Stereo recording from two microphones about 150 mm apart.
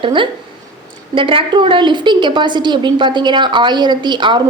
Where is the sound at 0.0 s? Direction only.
35° right (ahead or behind).